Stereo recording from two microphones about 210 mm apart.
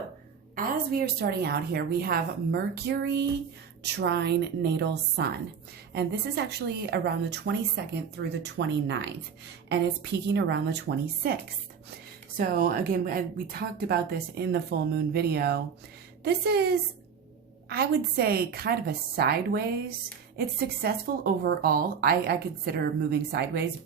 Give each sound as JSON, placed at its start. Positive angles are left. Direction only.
{"t": 0.5, "sound": "speech", "side_deg": -45}
{"t": 12.4, "sound": "speech", "side_deg": -40}